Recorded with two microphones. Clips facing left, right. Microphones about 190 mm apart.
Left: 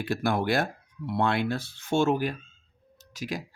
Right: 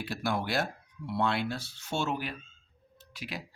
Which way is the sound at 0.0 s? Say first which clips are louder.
Left 6 dB; 55° left (ahead or behind).